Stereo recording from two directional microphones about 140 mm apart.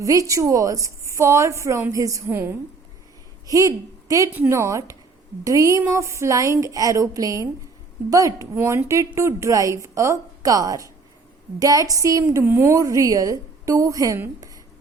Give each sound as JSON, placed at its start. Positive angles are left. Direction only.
{"t": 0.0, "sound": "a woman's voice", "side_deg": -25}